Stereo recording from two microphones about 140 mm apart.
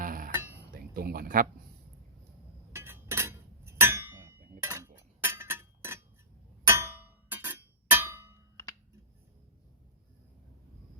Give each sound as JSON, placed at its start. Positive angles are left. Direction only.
{"t": 0.0, "sound": "a sound", "side_deg": -75}
{"t": 0.7, "sound": "speech", "side_deg": -90}
{"t": 2.7, "sound": "chink", "side_deg": -15}
{"t": 6.7, "sound": "clang", "side_deg": -20}